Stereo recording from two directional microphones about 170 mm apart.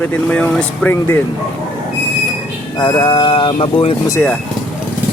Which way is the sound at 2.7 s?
25° left (ahead or behind).